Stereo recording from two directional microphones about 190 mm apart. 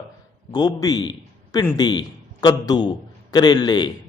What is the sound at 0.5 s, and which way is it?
A man's voice, 20° left (ahead or behind).